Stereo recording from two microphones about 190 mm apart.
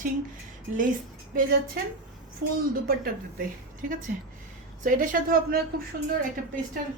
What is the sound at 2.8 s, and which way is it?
Speech, 50° right (ahead or behind).